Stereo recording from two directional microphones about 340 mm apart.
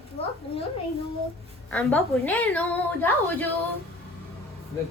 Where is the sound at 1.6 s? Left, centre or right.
Centre.